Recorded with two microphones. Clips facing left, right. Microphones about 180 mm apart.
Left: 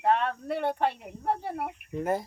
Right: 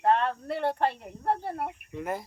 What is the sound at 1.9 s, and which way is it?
Speech, 35° left (ahead or behind).